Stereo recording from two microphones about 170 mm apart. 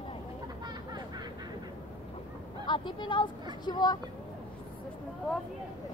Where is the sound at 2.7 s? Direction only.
25° left (ahead or behind).